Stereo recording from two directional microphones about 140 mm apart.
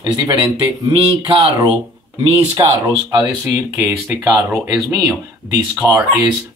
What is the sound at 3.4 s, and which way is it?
Speech, 15° right (ahead or behind).